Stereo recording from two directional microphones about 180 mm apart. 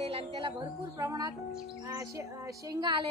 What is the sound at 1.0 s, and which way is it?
Music, 20° right (ahead or behind).